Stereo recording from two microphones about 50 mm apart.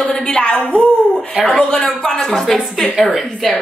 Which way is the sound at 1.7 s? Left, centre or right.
Centre.